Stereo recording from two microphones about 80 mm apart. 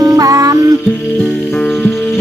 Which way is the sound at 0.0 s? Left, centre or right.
Right.